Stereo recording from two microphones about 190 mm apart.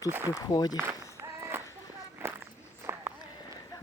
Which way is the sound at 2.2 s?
10° right (ahead or behind).